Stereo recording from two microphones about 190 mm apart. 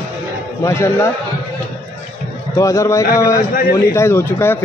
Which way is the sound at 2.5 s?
15° left (ahead or behind).